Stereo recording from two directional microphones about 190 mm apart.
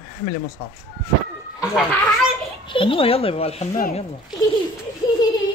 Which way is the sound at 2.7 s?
30° left (ahead or behind).